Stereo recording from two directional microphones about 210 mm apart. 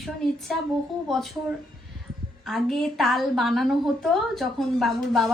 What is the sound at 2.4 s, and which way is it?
Speech, centre (ahead or behind).